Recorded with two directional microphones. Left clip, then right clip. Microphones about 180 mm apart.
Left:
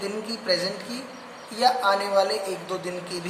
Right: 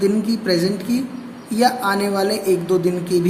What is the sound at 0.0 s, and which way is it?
Speech, 40° right (ahead or behind).